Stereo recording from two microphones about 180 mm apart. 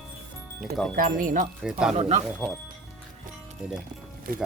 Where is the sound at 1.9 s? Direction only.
35° right (ahead or behind).